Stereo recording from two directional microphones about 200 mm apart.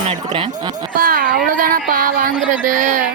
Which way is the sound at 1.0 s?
45° right (ahead or behind).